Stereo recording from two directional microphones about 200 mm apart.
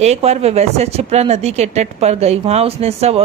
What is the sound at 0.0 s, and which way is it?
Speech, 35° right (ahead or behind).